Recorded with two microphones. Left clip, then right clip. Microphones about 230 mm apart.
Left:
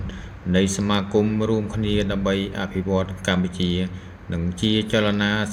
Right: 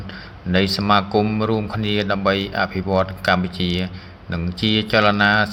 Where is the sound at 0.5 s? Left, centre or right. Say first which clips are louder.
Right 5 dB; centre.